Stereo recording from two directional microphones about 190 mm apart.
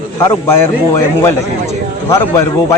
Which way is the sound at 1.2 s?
15° left (ahead or behind).